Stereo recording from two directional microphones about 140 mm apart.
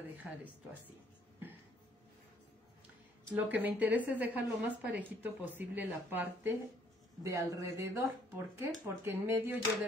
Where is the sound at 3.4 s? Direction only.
10° right (ahead or behind).